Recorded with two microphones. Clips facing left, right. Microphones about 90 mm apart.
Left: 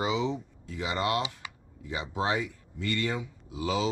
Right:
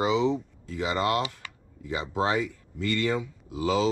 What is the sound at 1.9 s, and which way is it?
Speech, 35° right (ahead or behind).